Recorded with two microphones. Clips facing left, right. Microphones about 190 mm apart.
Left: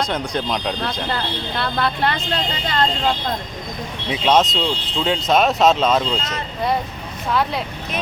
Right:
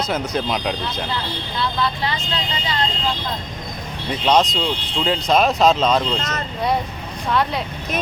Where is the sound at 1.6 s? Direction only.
60° left (ahead or behind).